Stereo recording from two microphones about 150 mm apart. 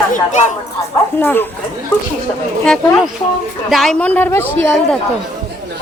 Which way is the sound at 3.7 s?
Centre (ahead or behind).